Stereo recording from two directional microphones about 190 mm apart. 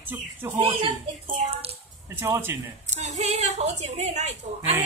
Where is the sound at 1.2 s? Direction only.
30° right (ahead or behind).